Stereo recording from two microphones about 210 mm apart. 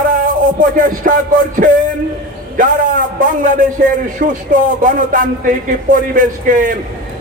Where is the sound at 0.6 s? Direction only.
40° right (ahead or behind).